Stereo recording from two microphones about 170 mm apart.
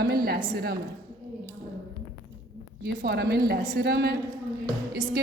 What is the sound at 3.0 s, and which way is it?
A woman's voice, 75° right (ahead or behind).